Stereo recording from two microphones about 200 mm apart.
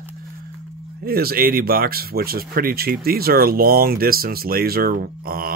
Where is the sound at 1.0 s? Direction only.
50° right (ahead or behind).